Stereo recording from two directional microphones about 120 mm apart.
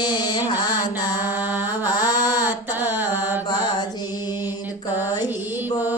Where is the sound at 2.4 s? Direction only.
20° right (ahead or behind).